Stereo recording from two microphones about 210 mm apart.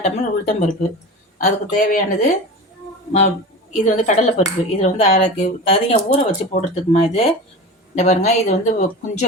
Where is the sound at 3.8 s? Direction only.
35° left (ahead or behind).